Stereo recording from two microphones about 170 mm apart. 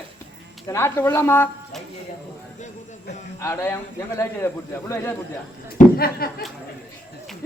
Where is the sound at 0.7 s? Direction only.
15° left (ahead or behind).